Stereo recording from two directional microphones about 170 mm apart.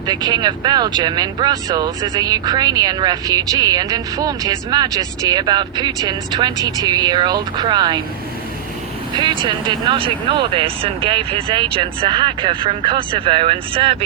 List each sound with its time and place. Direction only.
0.1 s speech: 25° right (ahead or behind)
9.1 s speech: 25° right (ahead or behind)